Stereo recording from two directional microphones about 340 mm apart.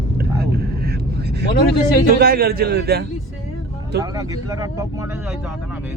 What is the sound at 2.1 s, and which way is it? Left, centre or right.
Speech, right.